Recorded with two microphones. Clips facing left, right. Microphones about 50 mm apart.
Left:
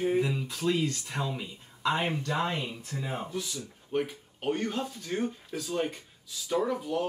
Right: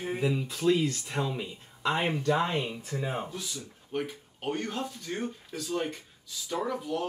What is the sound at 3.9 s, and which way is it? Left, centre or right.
Speech, centre.